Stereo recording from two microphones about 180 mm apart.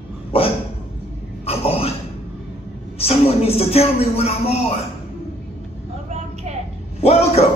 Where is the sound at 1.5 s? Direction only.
35° left (ahead or behind).